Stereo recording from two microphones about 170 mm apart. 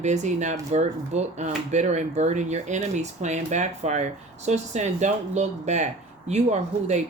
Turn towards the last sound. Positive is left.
turn(degrees=-40)  # may be behind; listen again after turning